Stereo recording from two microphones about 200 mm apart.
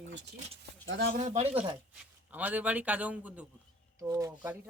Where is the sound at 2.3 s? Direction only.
10° right (ahead or behind).